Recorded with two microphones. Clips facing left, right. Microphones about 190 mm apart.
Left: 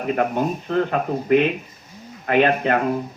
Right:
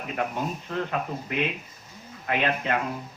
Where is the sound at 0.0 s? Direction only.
55° left (ahead or behind).